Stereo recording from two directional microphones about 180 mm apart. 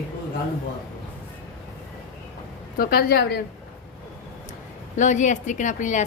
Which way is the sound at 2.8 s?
55° left (ahead or behind).